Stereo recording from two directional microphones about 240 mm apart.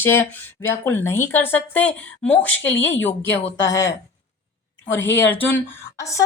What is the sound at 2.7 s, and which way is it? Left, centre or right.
Speech, left.